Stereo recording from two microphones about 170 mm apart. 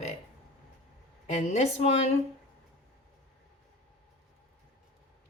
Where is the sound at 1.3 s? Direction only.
40° left (ahead or behind).